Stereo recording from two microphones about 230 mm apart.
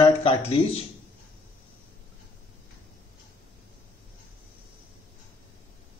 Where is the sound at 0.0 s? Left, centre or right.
Left.